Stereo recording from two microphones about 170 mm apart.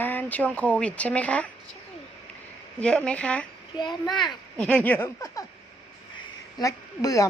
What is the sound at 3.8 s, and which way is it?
Speech, 25° left (ahead or behind).